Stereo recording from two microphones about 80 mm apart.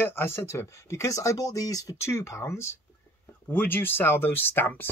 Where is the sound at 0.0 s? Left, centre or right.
Left.